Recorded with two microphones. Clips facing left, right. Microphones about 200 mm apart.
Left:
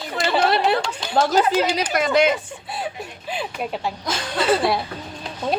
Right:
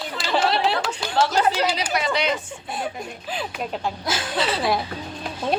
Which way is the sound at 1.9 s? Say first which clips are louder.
Left 8 dB; 50° left (ahead or behind).